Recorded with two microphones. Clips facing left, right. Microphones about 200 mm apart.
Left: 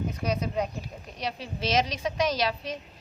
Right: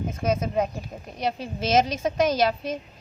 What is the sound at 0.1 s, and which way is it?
A woman's voice, 50° right (ahead or behind).